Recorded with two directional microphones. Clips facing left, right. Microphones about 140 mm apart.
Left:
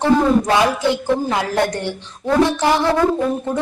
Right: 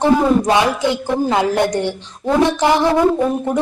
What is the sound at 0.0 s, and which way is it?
A man's voice, 15° right (ahead or behind).